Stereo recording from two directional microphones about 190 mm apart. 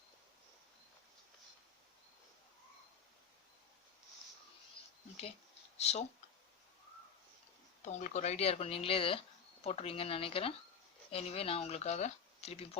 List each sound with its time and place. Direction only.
5.7 s speech: 35° left (ahead or behind)
7.8 s speech: 35° left (ahead or behind)